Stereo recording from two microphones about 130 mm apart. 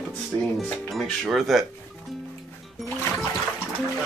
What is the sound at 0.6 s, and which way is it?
Speech, centre (ahead or behind).